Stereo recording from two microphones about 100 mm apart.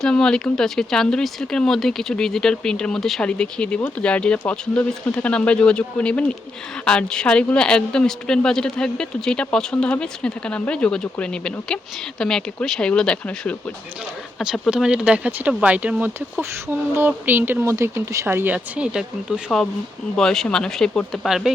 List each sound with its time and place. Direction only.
0.0 s a woman's voice: 5° left (ahead or behind)
14.3 s speech: centre (ahead or behind)
19.5 s a woman's voice: 10° left (ahead or behind)